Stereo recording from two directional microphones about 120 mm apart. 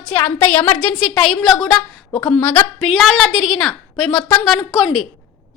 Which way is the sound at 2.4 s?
15° left (ahead or behind).